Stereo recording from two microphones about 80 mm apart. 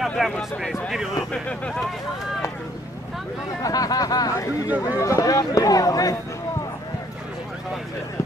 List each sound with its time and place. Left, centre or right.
0.2 s speech: centre
1.3 s speech: centre
3.6 s speech: left